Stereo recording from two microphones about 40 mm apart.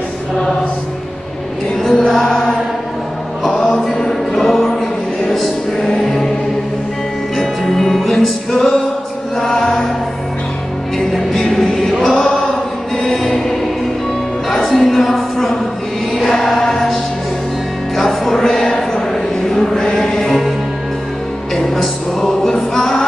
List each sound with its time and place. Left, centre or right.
1.8 s chant: centre
3.4 s music: centre
4.3 s chant: centre
5.8 s music: centre
7.3 s music: centre
9.4 s chant: centre
11.1 s music: centre
14.5 s a sound: centre
16.1 s chant: centre
16.7 s music: centre
18.5 s a sound: centre
19.5 s choir: centre
21.5 s music: centre